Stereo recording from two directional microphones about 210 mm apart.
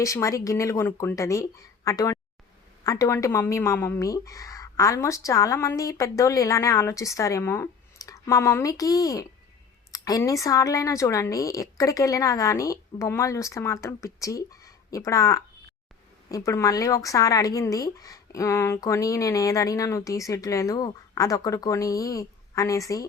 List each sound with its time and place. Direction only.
0.0 s speech: 15° left (ahead or behind)